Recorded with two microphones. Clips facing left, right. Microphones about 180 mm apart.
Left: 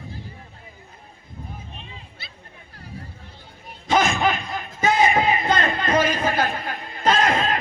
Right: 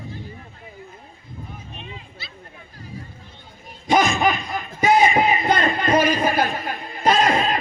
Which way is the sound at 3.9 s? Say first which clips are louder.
Right 2 dB; 15° right (ahead or behind).